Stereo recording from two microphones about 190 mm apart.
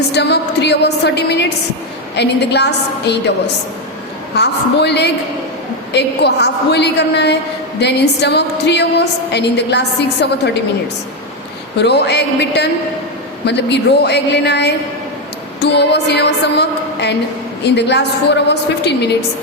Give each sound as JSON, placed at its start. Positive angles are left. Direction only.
{"t": 0.1, "sound": "a woman's voice", "side_deg": 60}
{"t": 11.8, "sound": "a woman's voice", "side_deg": 65}